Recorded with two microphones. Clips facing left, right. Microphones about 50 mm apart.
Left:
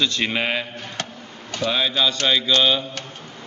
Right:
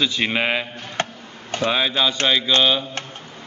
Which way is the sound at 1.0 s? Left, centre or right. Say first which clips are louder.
Right 7 dB; right.